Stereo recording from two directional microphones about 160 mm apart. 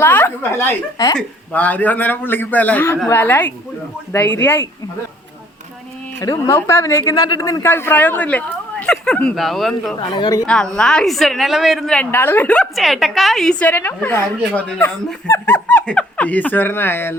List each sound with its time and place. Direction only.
0.0 s a woman's voice: 15° left (ahead or behind)
1.5 s a woman's voice: 10° left (ahead or behind)
6.1 s a woman's voice: 20° left (ahead or behind); by 9.9 s centre (ahead or behind)
10.0 s a woman's voice: 30° left (ahead or behind)
10.4 s a woman's voice: 5° left (ahead or behind)